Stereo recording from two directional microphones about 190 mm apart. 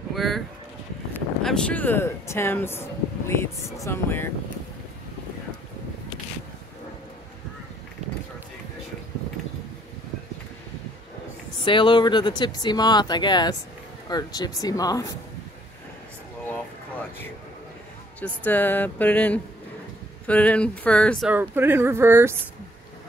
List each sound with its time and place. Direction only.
0.1 s a sound: centre (ahead or behind)
1.4 s speech: 5° left (ahead or behind)
11.6 s speech: 25° left (ahead or behind)
18.2 s speech: 10° left (ahead or behind)
21.3 s speech: 10° right (ahead or behind)